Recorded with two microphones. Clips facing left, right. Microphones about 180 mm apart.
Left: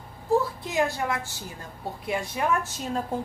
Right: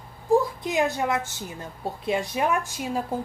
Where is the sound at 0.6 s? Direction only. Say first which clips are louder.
Right 2 dB; 20° right (ahead or behind).